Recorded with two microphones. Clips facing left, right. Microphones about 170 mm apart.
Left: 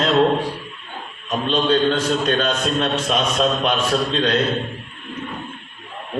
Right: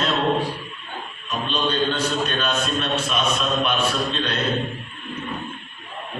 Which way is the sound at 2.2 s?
90° left.